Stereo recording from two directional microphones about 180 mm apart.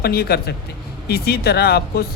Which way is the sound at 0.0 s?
60° left (ahead or behind).